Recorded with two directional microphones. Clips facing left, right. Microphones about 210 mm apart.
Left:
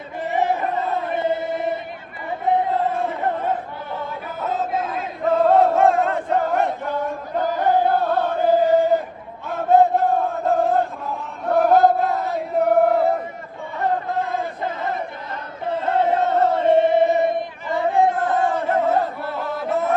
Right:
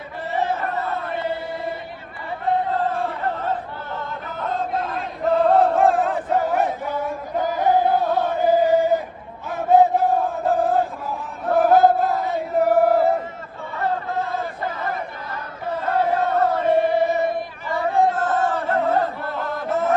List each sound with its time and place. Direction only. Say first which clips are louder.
0.2 s chant: left 3 dB; 15° left (ahead or behind)
2.5 s a sound: left 2 dB; 15° left (ahead or behind)
3.9 s chant: left 2 dB; 5° left (ahead or behind)
13.7 s a sound: left 2 dB; 15° left (ahead or behind)
15.8 s chant: left 1 dB; 20° left (ahead or behind)
18.8 s chant: left 1 dB; centre (ahead or behind)